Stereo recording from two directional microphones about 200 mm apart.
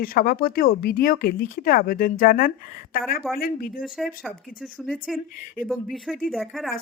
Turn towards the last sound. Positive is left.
turn(degrees=0)  # may be behind; listen again after turning